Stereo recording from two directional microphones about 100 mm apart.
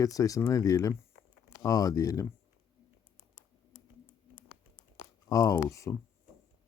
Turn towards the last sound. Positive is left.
turn(degrees=30)  # may be behind; listen again after turning